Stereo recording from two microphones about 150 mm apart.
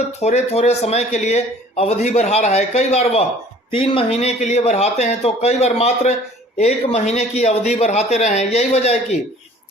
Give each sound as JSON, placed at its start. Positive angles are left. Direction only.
{"t": 0.2, "sound": "speech", "side_deg": 45}